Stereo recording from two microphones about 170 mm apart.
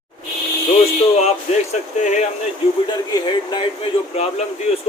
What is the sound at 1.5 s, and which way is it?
Speech, 40° left (ahead or behind).